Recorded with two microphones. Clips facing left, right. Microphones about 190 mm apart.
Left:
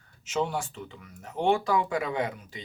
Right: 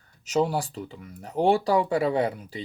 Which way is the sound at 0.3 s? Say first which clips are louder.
Right 5 dB; 35° right (ahead or behind).